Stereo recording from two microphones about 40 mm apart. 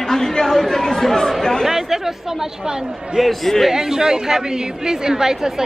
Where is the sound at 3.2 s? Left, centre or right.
Centre.